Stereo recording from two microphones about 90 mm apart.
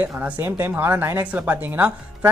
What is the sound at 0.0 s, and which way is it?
Speech, 20° right (ahead or behind).